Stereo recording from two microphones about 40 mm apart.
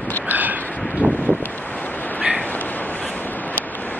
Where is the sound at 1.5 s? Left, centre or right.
Left.